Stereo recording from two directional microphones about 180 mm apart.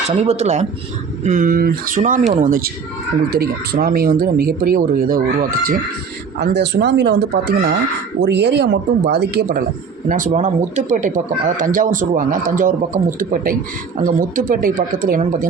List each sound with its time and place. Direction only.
0.2 s speech: 35° right (ahead or behind)
6.4 s speech: 70° right (ahead or behind)
10.1 s speech: 45° right (ahead or behind)